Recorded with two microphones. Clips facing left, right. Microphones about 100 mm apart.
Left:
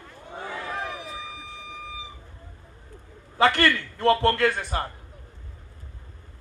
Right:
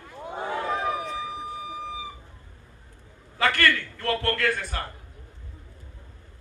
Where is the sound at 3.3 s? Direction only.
25° left (ahead or behind).